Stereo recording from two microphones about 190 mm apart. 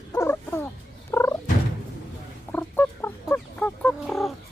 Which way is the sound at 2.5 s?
10° left (ahead or behind).